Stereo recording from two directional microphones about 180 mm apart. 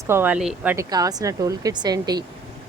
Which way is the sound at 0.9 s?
20° right (ahead or behind).